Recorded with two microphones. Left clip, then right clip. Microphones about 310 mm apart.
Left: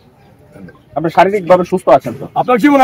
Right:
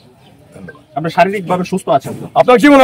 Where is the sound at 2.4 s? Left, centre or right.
Centre.